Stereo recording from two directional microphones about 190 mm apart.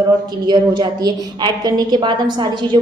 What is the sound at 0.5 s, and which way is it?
A woman's voice, 25° right (ahead or behind).